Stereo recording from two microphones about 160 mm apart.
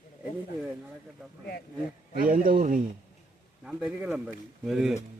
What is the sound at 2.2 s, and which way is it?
Speech, 60° right (ahead or behind).